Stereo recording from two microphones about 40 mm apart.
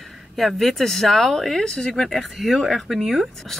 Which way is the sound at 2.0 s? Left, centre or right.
Centre.